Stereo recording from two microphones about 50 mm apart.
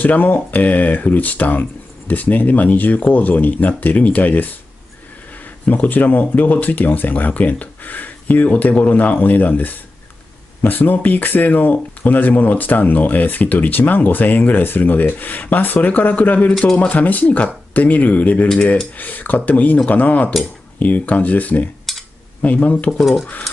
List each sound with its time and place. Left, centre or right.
0.0 s speech: left
5.7 s speech: left
21.9 s a sound: centre
22.4 s speech: left